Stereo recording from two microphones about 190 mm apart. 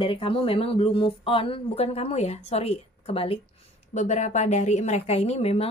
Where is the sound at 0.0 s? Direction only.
30° left (ahead or behind).